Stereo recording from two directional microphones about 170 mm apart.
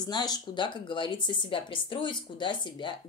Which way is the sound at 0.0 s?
25° left (ahead or behind).